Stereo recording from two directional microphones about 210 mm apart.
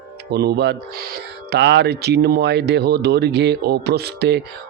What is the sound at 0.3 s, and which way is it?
Speech, 50° right (ahead or behind).